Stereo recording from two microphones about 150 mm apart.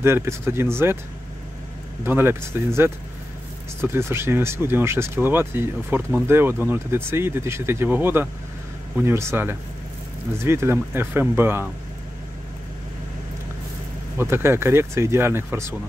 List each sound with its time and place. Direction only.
0.0 s speech: 15° right (ahead or behind)
2.0 s speech: 15° right (ahead or behind)
14.1 s speech: 15° right (ahead or behind)